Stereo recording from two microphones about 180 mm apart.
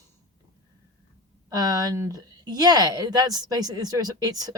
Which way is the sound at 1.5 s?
20° right (ahead or behind).